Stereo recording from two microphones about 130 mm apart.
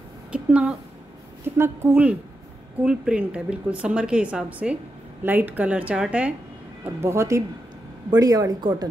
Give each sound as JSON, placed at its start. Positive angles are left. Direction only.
{"t": 0.3, "sound": "a woman's voice", "side_deg": -10}
{"t": 6.8, "sound": "a woman's voice", "side_deg": -20}